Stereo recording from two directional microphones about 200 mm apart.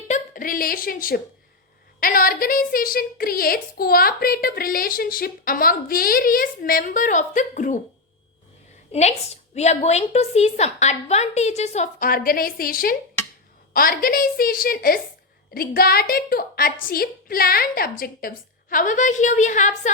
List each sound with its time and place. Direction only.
0.1 s a woman's voice: 45° left (ahead or behind)
8.9 s a woman's voice: 35° left (ahead or behind)